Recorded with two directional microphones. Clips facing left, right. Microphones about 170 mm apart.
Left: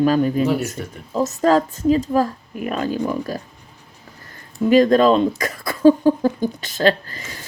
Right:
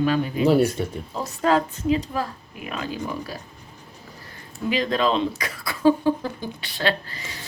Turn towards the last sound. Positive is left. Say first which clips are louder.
# left 6 dB
turn(degrees=45)  # may be behind; listen again after turning